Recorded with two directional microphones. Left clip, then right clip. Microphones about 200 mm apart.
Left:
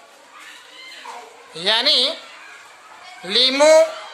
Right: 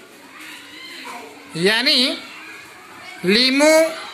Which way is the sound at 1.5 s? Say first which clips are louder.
Even; centre (ahead or behind).